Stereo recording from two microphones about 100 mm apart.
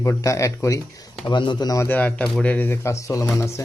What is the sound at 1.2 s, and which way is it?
Speech, 50° left (ahead or behind).